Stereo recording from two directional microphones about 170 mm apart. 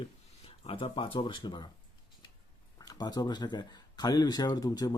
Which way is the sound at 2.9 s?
25° left (ahead or behind).